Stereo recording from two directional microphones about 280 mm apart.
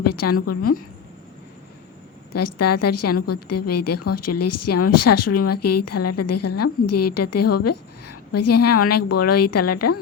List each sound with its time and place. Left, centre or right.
0.0 s a woman's voice: left
2.3 s a woman's voice: left